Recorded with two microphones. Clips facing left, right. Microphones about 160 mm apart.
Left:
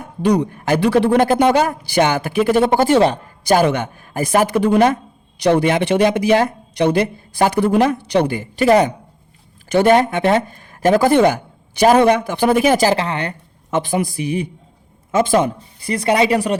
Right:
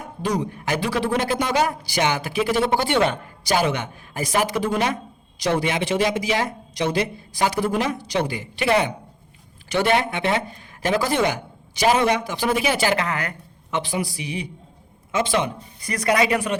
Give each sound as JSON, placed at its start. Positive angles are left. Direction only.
{"t": 0.2, "sound": "speech", "side_deg": 60}
{"t": 3.4, "sound": "a man's voice", "side_deg": 50}
{"t": 13.7, "sound": "speech", "side_deg": 50}
{"t": 15.8, "sound": "a man's voice", "side_deg": 30}